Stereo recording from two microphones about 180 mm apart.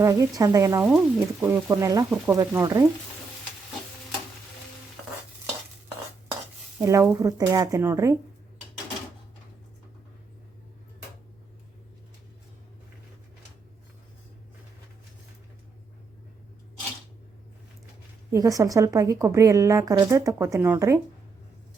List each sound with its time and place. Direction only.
0.0 s a woman's voice: 20° right (ahead or behind)
6.7 s a woman's voice: 15° right (ahead or behind)
18.3 s a woman's voice: 20° right (ahead or behind)